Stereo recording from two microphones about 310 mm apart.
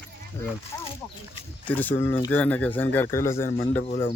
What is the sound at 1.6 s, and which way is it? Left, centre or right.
A man's voice, centre.